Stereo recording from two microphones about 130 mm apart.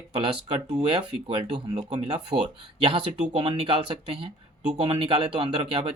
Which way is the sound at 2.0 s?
50° right (ahead or behind).